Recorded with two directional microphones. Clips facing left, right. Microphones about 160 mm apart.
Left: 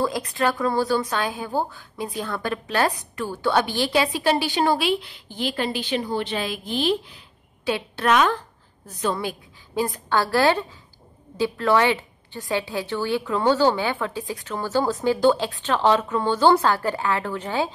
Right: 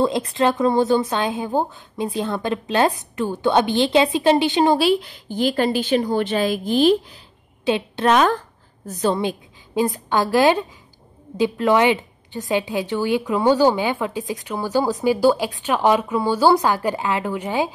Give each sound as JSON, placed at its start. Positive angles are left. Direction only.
{"t": 0.0, "sound": "a woman's voice", "side_deg": -25}
{"t": 4.7, "sound": "a woman's voice", "side_deg": -40}
{"t": 7.6, "sound": "a woman's voice", "side_deg": -20}
{"t": 8.1, "sound": "a woman's voice", "side_deg": -40}
{"t": 9.1, "sound": "a woman's voice", "side_deg": -25}